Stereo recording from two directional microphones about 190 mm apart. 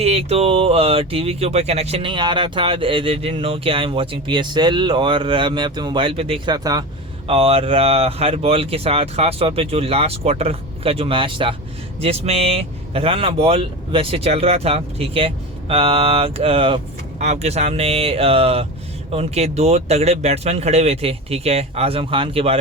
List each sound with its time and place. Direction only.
0.0 s speech: 30° right (ahead or behind)
7.3 s speech: 30° right (ahead or behind)